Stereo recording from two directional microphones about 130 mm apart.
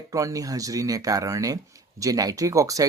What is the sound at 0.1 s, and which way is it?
Speech, 25° right (ahead or behind).